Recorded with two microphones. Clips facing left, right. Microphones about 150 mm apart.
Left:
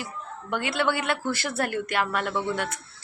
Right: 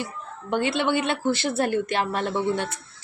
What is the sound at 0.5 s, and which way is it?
Speech, 25° right (ahead or behind).